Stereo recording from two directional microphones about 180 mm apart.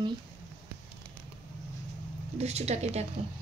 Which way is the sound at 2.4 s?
35° right (ahead or behind).